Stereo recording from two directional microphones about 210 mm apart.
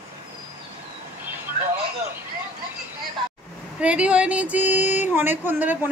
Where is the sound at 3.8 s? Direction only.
5° right (ahead or behind).